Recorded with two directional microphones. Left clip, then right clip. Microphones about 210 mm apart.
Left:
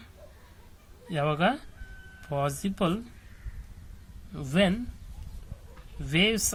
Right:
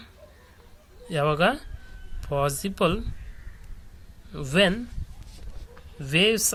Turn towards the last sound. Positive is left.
turn(degrees=-10)  # may be behind; listen again after turning